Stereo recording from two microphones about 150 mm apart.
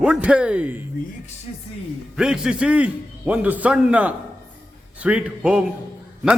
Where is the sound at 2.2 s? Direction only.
5° right (ahead or behind).